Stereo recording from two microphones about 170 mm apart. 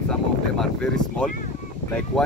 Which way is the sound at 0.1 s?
5° left (ahead or behind).